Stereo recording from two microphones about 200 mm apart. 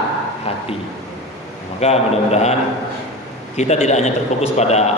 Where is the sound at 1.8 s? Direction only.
35° left (ahead or behind).